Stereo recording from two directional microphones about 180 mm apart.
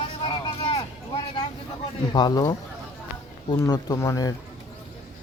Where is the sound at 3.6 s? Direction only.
20° left (ahead or behind).